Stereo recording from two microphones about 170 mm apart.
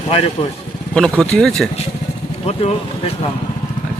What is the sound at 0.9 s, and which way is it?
Speech, 5° left (ahead or behind).